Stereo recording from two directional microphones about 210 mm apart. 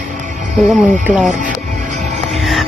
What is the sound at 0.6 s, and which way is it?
Speech, centre (ahead or behind).